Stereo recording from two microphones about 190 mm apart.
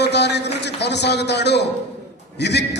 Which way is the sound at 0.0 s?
65° left (ahead or behind).